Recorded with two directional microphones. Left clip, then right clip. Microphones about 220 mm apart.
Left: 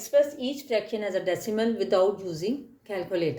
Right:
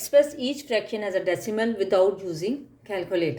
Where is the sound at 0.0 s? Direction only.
40° right (ahead or behind).